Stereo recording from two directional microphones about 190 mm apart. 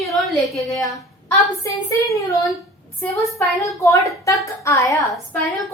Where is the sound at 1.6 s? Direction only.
15° left (ahead or behind).